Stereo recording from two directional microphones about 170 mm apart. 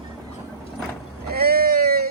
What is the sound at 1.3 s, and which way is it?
Speech, 65° right (ahead or behind).